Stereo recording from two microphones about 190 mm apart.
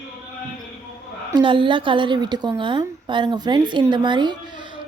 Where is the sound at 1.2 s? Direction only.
25° right (ahead or behind).